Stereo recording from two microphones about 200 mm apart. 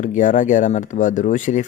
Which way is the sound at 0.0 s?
40° left (ahead or behind).